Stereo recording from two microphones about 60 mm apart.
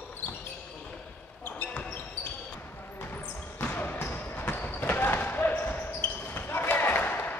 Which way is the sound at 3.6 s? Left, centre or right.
Left.